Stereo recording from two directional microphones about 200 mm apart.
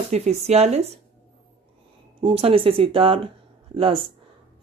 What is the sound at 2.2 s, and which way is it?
Speech, 30° right (ahead or behind).